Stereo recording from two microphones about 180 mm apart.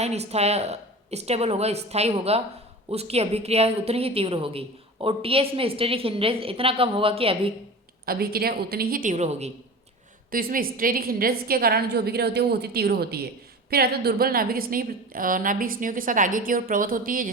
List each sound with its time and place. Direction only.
0.0 s a woman's voice: 35° right (ahead or behind)
8.0 s a woman's voice: 55° right (ahead or behind); by 9.5 s 40° right (ahead or behind)
10.3 s a woman's voice: 50° right (ahead or behind)